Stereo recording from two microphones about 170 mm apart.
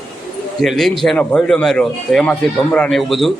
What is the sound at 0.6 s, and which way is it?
A man's voice, centre (ahead or behind).